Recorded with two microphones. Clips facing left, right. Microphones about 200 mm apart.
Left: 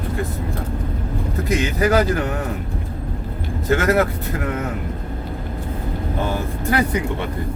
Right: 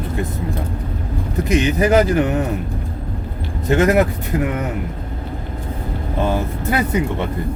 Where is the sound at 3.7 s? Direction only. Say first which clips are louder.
Right 3 dB; 20° right (ahead or behind).